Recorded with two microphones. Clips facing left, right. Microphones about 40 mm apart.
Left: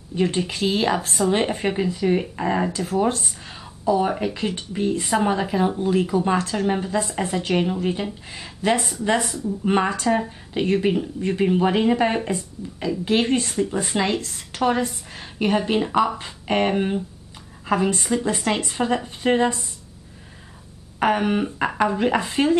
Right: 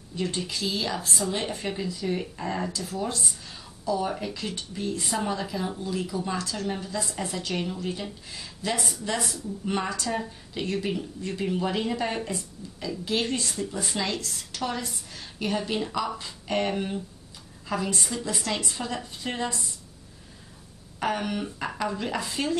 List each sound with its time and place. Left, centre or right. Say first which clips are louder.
0.1 s a woman's voice: left 8 dB; left
21.0 s speech: left 8 dB; left